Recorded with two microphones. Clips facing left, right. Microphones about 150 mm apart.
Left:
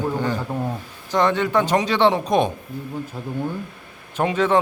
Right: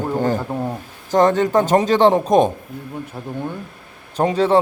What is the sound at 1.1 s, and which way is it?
A man's voice, 45° right (ahead or behind).